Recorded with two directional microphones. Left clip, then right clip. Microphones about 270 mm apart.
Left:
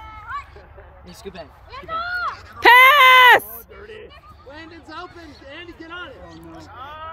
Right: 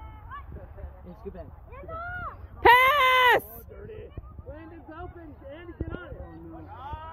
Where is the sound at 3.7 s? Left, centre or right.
Left.